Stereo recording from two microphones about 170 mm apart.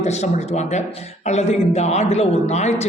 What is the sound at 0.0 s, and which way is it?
A man's voice, 40° left (ahead or behind).